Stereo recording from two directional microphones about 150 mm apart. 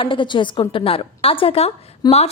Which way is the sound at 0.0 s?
35° left (ahead or behind).